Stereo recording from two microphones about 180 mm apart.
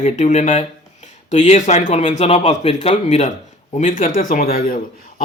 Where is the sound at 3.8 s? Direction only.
45° left (ahead or behind).